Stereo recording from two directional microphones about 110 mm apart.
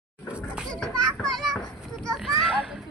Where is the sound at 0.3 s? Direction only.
10° right (ahead or behind).